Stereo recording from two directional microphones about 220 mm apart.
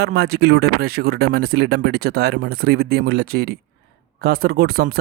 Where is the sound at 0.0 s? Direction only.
45° right (ahead or behind).